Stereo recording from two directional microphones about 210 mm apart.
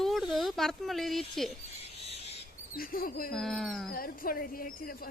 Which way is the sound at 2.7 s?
45° left (ahead or behind).